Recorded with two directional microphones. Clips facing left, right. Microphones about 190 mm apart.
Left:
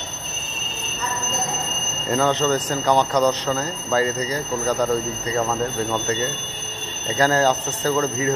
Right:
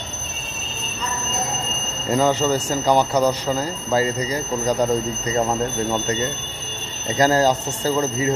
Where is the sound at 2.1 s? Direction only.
10° right (ahead or behind).